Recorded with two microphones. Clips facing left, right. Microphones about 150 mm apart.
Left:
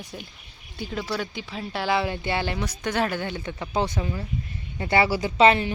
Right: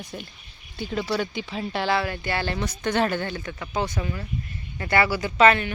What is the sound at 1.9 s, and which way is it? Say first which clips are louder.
Speech: left 1 dB; 20° left (ahead or behind).